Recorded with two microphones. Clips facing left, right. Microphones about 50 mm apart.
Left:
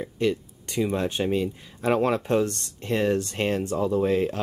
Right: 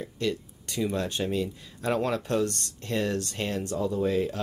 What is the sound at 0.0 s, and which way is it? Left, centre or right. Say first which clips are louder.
Speech: left 5 dB; left.